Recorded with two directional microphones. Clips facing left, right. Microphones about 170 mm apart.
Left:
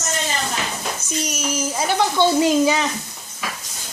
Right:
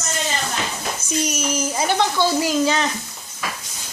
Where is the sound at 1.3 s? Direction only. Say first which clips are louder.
Right 1 dB; centre (ahead or behind).